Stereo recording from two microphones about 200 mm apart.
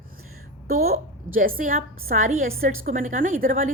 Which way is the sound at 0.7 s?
50° right (ahead or behind).